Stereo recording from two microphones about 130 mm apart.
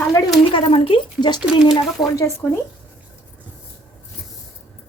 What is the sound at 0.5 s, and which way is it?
Speech, 45° left (ahead or behind).